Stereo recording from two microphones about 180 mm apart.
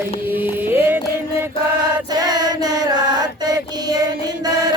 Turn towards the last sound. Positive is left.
turn(degrees=-20)  # may be behind; listen again after turning